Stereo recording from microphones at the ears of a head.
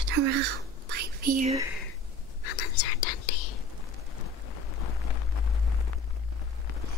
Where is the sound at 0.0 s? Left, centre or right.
Right.